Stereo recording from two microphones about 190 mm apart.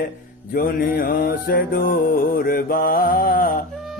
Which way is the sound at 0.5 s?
50° left (ahead or behind).